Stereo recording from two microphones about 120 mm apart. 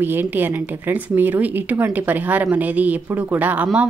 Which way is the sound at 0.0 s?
15° right (ahead or behind).